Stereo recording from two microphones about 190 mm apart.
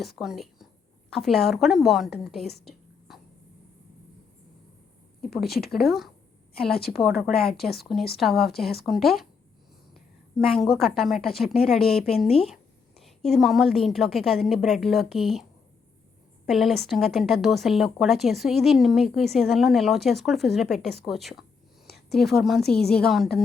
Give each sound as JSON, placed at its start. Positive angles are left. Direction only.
{"t": 0.2, "sound": "a woman's voice", "side_deg": 0}
{"t": 3.1, "sound": "hiccup", "side_deg": 0}
{"t": 5.2, "sound": "a woman's voice", "side_deg": 0}
{"t": 7.2, "sound": "a woman's voice", "side_deg": 0}
{"t": 7.6, "sound": "speech", "side_deg": 55}
{"t": 8.1, "sound": "a woman's voice", "side_deg": 0}
{"t": 10.4, "sound": "a woman's voice", "side_deg": 0}
{"t": 16.5, "sound": "a woman's voice", "side_deg": 0}